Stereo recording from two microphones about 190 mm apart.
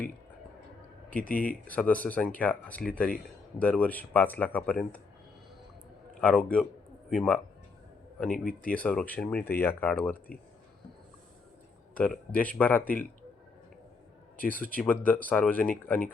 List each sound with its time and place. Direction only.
1.3 s speech: 45° left (ahead or behind)
1.6 s speech: 10° left (ahead or behind)
6.1 s a man's voice: 5° left (ahead or behind)
8.3 s speech: 45° left (ahead or behind)
8.7 s speech: 5° left (ahead or behind)
11.9 s speech: 5° left (ahead or behind)
14.3 s a man's voice: 45° right (ahead or behind)
14.8 s speech: 10° left (ahead or behind)